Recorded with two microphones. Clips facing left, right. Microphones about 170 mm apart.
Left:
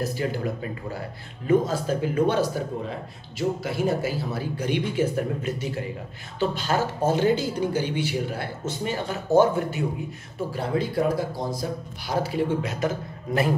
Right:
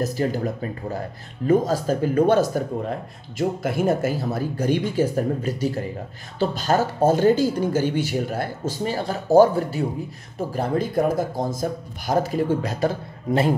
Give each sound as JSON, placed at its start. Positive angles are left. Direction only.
{"t": 0.0, "sound": "speech", "side_deg": -40}